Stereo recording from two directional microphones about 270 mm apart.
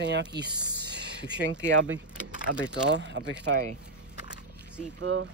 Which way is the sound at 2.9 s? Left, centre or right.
Right.